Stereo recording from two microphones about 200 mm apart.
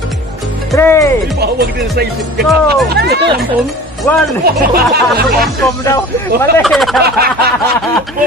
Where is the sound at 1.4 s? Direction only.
55° right (ahead or behind).